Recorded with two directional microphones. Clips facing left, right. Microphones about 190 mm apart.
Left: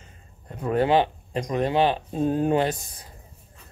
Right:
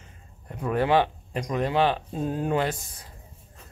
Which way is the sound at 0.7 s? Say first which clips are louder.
Left 2 dB; 25° left (ahead or behind).